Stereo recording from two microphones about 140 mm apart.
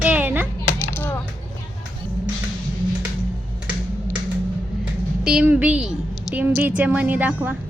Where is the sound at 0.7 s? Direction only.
15° left (ahead or behind).